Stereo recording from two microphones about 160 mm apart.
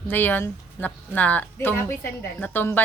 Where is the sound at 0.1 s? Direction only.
10° left (ahead or behind).